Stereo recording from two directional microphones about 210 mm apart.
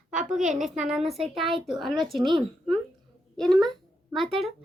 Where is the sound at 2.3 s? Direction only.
25° right (ahead or behind).